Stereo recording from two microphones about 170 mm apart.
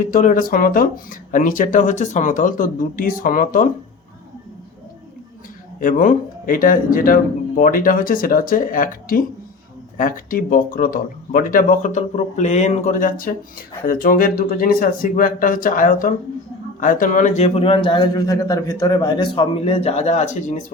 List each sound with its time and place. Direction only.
0.0 s speech: 50° left (ahead or behind)
5.8 s a man's voice: 50° left (ahead or behind)